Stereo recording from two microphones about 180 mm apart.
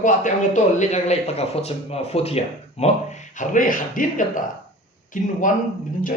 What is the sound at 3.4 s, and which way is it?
A man's voice, 45° left (ahead or behind).